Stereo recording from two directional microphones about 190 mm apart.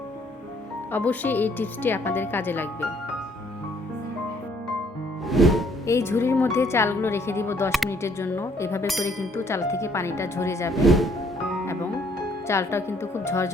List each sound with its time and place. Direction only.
0.9 s speech: 10° left (ahead or behind)
5.3 s music: centre (ahead or behind)
5.8 s speech: 15° left (ahead or behind)
10.8 s speech: centre (ahead or behind)
11.6 s music: 15° left (ahead or behind)
12.5 s speech: 15° left (ahead or behind)